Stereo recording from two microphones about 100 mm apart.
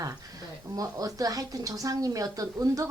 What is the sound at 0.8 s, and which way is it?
Speech, 35° right (ahead or behind).